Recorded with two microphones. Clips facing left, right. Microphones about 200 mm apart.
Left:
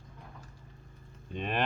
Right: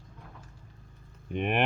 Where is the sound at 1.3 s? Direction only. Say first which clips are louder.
Right 5 dB; 15° right (ahead or behind).